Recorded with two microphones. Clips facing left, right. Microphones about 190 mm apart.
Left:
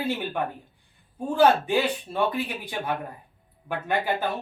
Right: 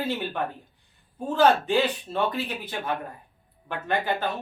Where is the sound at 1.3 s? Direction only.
10° left (ahead or behind).